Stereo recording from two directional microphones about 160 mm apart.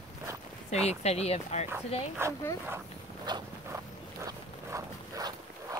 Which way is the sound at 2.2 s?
15° right (ahead or behind).